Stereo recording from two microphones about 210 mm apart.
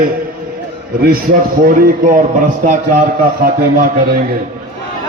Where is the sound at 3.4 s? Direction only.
45° right (ahead or behind).